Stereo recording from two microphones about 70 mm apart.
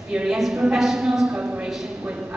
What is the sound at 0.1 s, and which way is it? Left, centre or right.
A woman's voice, centre.